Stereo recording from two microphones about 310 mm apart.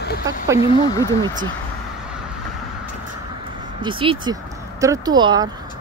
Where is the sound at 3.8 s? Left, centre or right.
Centre.